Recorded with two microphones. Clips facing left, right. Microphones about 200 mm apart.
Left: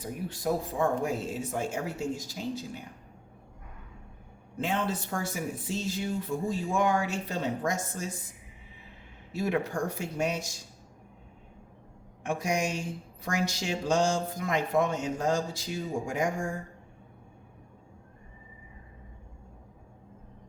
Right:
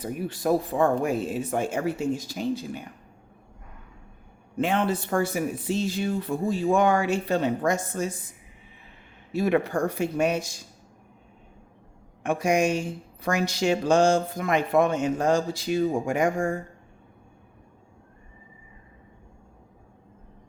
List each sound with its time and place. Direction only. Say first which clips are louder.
0.0 s speech: right 5 dB; 70° right (ahead or behind)
4.5 s speech: right 6 dB; 70° right (ahead or behind)
9.3 s speech: right 6 dB; 60° right (ahead or behind)
12.2 s speech: right 7 dB; 60° right (ahead or behind)